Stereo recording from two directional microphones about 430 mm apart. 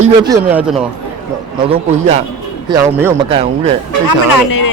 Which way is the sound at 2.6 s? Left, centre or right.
Centre.